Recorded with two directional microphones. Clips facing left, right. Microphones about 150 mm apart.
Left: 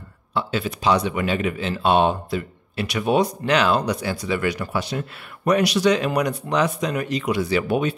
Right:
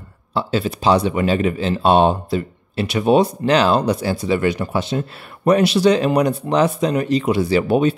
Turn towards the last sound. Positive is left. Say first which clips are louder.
# right 5 dB
turn(degrees=-30)  # may be behind; listen again after turning